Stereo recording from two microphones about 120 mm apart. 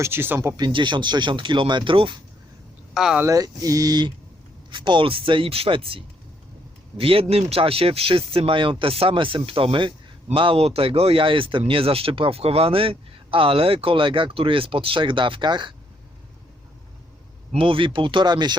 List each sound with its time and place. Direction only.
0.0 s speech: 20° right (ahead or behind)
0.5 s speech: 40° right (ahead or behind)
2.9 s speech: 5° right (ahead or behind)
3.2 s speech: 30° right (ahead or behind)
17.5 s speech: 50° right (ahead or behind)